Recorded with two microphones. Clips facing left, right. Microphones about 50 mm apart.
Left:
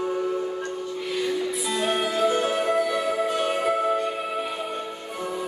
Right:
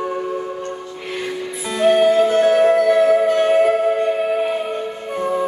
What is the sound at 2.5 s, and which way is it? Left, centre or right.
Music, right.